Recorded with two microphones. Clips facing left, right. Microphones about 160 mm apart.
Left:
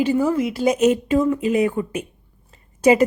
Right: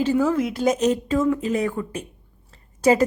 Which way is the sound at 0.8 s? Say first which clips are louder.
Left 3 dB; 15° left (ahead or behind).